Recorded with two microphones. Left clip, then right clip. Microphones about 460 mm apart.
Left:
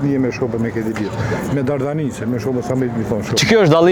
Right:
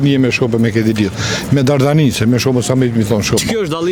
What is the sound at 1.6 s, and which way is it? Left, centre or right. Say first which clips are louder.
Speech: right 9 dB; right.